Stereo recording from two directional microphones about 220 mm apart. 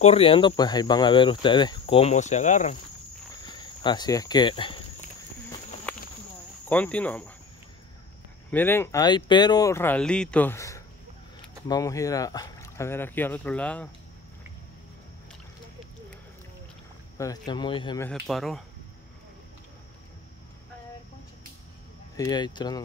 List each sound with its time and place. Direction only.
0.0 s speech: 25° left (ahead or behind)
3.4 s speech: 20° left (ahead or behind)
5.9 s a sound: 5° left (ahead or behind)
6.7 s speech: 5° left (ahead or behind)
8.5 s speech: 10° left (ahead or behind)
17.2 s speech: 20° left (ahead or behind)
18.2 s speech: centre (ahead or behind)
22.1 s speech: 15° left (ahead or behind)